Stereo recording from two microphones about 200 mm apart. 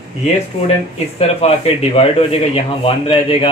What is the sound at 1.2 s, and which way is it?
Speech, 30° left (ahead or behind).